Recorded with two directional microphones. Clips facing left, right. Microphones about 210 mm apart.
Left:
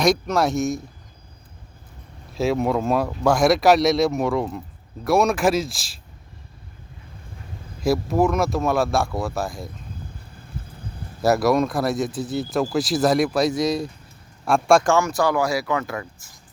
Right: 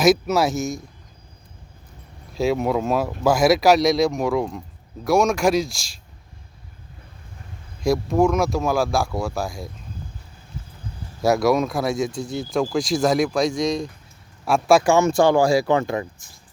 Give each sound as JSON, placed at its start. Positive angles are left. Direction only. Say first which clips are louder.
{"t": 0.0, "sound": "speech", "louder": "right 2 dB", "side_deg": -5}
{"t": 2.3, "sound": "speech", "louder": "even", "side_deg": 0}
{"t": 7.8, "sound": "speech", "louder": "right 1 dB", "side_deg": 0}
{"t": 10.6, "sound": "clip-clop", "louder": "left 1 dB", "side_deg": 55}
{"t": 11.2, "sound": "speech", "louder": "even", "side_deg": 0}
{"t": 14.9, "sound": "speech", "louder": "right 4 dB", "side_deg": -25}